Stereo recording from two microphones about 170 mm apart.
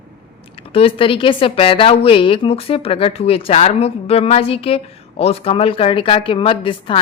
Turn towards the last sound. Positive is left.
turn(degrees=30)  # may be behind; listen again after turning